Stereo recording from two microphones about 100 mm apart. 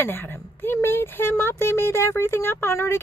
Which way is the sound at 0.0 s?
20° left (ahead or behind).